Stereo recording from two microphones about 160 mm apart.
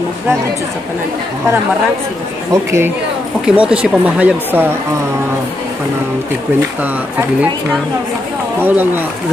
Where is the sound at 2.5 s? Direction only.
15° right (ahead or behind).